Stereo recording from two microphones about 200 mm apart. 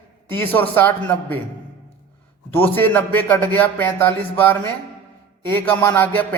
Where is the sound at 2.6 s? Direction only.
10° left (ahead or behind).